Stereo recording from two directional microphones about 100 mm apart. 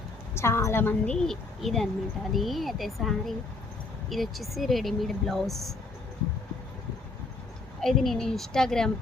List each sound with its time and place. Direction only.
0.3 s a woman's voice: 25° left (ahead or behind)
1.0 s speech: 5° left (ahead or behind)
7.8 s speech: 5° left (ahead or behind)